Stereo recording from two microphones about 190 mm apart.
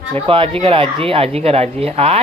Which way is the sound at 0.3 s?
30° right (ahead or behind).